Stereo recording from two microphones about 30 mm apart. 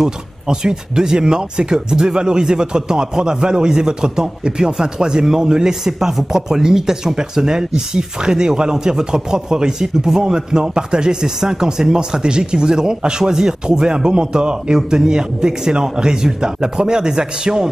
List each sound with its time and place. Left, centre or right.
0.0 s speech: right